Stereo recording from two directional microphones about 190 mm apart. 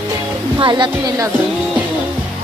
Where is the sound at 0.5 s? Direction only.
25° right (ahead or behind).